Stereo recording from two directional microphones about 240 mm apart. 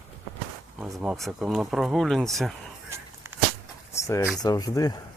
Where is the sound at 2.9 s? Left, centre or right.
Centre.